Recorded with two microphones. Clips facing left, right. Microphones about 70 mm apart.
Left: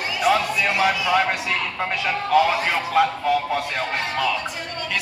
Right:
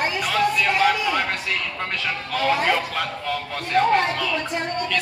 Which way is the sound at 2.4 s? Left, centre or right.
Centre.